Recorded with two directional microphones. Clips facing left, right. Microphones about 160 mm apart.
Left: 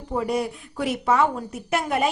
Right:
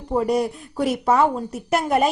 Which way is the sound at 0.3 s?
40° right (ahead or behind).